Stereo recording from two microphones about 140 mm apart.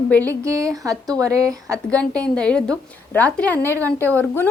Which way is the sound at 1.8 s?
5° left (ahead or behind).